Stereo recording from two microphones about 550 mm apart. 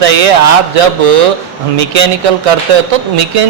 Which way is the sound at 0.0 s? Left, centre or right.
Right.